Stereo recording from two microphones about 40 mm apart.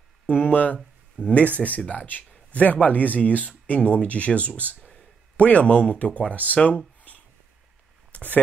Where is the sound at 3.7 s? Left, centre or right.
Left.